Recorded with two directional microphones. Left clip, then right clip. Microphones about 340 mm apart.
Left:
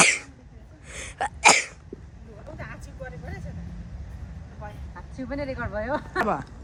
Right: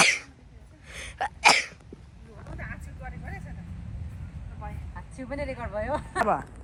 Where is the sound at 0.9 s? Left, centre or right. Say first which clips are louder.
Left 2 dB; centre.